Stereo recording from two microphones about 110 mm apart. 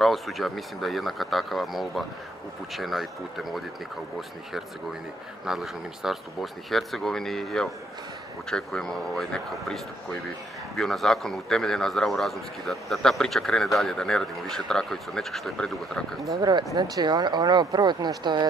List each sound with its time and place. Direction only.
0.0 s speech: centre (ahead or behind)
5.4 s speech: 5° right (ahead or behind)
10.8 s speech: 5° left (ahead or behind)
16.3 s speech: 40° right (ahead or behind)